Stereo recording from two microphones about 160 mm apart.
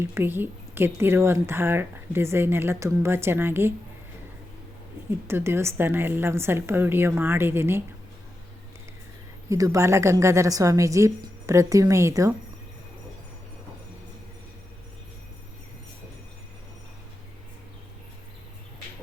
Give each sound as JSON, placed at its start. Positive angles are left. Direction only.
{"t": 0.0, "sound": "a woman's voice", "side_deg": -15}
{"t": 5.3, "sound": "a woman's voice", "side_deg": -15}
{"t": 9.5, "sound": "a woman's voice", "side_deg": -20}